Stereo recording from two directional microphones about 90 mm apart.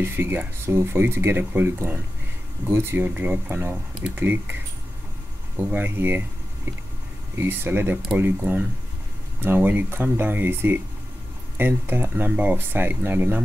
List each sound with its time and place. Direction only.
0.0 s speech: 25° right (ahead or behind)
5.7 s speech: 25° right (ahead or behind)
7.3 s speech: 25° right (ahead or behind)